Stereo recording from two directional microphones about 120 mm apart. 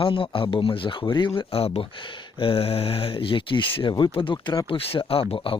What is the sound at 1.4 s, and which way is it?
Speech, 55° left (ahead or behind).